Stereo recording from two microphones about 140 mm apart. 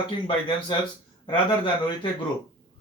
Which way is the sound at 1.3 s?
40° left (ahead or behind).